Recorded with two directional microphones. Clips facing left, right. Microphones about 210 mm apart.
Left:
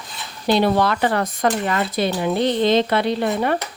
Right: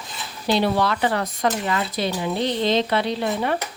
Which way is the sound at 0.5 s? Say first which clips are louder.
Left 3 dB; 55° left (ahead or behind).